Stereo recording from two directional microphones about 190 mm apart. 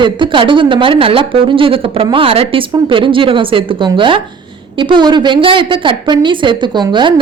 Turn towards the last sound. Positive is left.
turn(degrees=-25)  # may be behind; listen again after turning